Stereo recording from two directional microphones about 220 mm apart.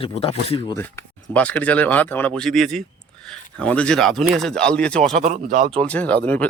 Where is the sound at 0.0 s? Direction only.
25° left (ahead or behind).